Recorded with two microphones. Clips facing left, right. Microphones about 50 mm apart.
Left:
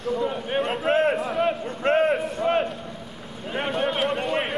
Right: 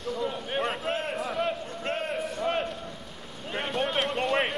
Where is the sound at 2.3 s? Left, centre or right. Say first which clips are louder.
Left 6 dB; centre.